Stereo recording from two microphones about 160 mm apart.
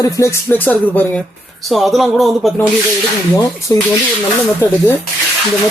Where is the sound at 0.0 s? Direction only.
20° left (ahead or behind); by 2.6 s centre (ahead or behind).